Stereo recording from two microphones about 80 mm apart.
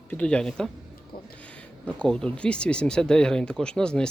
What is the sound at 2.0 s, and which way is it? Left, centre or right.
Speech, centre.